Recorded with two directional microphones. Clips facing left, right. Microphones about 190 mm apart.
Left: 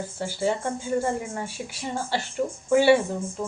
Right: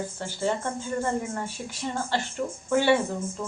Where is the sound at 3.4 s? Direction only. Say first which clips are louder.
Left 5 dB; 15° left (ahead or behind).